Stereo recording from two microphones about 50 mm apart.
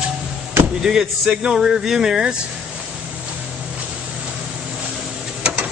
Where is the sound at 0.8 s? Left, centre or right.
Centre.